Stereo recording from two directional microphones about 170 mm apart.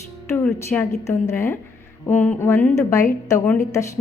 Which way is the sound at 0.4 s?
10° left (ahead or behind).